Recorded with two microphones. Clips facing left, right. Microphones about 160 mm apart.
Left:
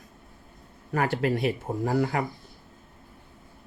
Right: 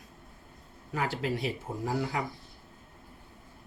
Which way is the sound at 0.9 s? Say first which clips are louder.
Left 6 dB; 60° left (ahead or behind).